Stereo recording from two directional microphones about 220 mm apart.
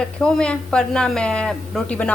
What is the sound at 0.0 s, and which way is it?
A woman's voice, 5° left (ahead or behind).